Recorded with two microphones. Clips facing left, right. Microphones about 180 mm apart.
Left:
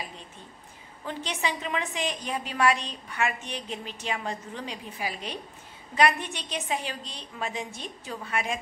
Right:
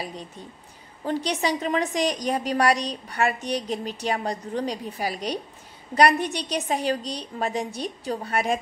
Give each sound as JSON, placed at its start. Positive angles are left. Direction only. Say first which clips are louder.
{"t": 0.0, "sound": "a woman's voice", "louder": "right 6 dB", "side_deg": -40}